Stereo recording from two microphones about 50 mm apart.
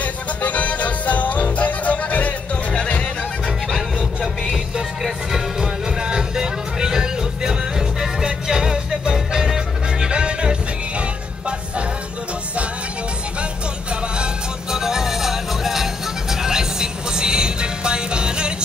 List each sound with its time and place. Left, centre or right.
0.0 s music: left
3.7 s music: centre
14.1 s music: centre